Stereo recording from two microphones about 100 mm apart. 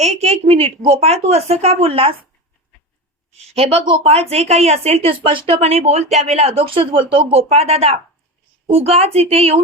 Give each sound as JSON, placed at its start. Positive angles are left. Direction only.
{"t": 0.0, "sound": "a woman's voice", "side_deg": -90}
{"t": 3.3, "sound": "a woman's voice", "side_deg": -85}
{"t": 4.0, "sound": "a woman's voice", "side_deg": -90}
{"t": 7.3, "sound": "a woman's voice", "side_deg": -90}